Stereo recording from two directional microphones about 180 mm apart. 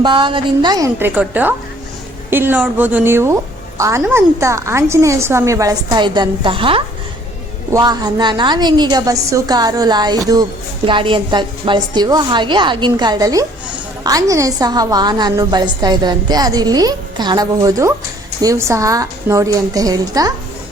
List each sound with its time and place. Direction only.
0.0 s a woman's voice: 25° right (ahead or behind)
0.9 s a woman's voice: 10° right (ahead or behind)